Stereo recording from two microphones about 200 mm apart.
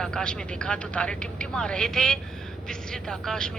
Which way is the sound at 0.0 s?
5° left (ahead or behind).